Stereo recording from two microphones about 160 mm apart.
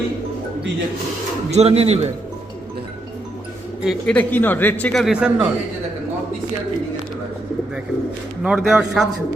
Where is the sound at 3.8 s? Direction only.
10° left (ahead or behind).